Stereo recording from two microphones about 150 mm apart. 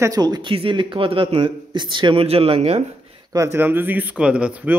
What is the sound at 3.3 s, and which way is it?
Speech, 20° right (ahead or behind).